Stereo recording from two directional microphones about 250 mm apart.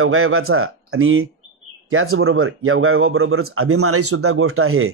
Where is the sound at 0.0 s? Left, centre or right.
Right.